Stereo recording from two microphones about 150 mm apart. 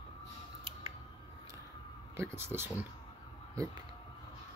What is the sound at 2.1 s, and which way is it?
Speech, 15° right (ahead or behind).